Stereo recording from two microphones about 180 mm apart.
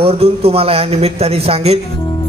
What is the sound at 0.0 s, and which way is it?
A man's voice, 35° right (ahead or behind).